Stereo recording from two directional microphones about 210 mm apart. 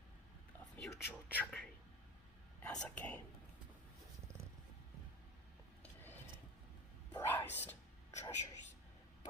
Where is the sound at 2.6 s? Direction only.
5° left (ahead or behind).